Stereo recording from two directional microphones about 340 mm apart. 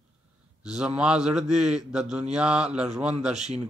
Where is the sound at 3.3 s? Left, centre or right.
Centre.